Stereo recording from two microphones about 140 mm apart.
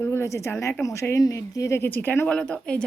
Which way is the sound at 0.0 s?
20° left (ahead or behind).